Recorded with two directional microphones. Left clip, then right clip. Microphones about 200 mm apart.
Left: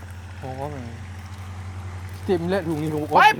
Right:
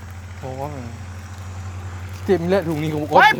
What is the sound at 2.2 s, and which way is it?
Speech, 35° right (ahead or behind).